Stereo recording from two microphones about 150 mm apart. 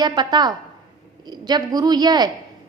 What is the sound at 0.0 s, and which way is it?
A woman's voice, 30° right (ahead or behind).